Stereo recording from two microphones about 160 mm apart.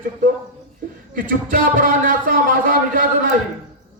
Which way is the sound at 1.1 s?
60° right (ahead or behind).